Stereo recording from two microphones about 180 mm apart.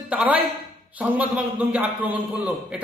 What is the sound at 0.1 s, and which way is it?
A man's voice, 10° right (ahead or behind).